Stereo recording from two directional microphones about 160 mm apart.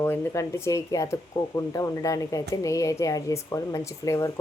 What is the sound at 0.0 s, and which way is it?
Speech, 15° left (ahead or behind).